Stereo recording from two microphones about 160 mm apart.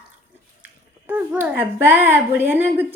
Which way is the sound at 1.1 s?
15° right (ahead or behind).